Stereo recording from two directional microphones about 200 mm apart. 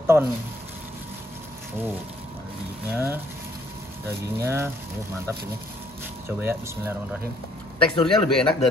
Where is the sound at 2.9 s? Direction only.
10° right (ahead or behind).